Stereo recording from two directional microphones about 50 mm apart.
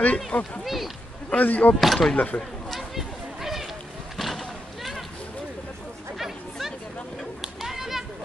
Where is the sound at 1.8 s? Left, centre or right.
Centre.